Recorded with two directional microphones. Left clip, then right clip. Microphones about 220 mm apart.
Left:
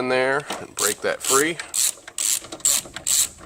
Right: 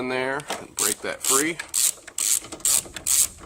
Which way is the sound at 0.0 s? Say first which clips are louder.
Left 5 dB; 40° left (ahead or behind).